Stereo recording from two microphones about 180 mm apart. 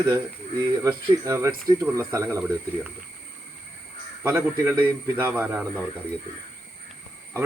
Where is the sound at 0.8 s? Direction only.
15° right (ahead or behind).